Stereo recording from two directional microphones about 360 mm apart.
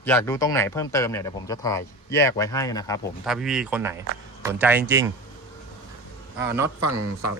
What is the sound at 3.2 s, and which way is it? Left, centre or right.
Speech, centre.